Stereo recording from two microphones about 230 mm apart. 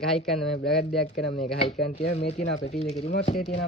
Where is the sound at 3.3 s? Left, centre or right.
Left.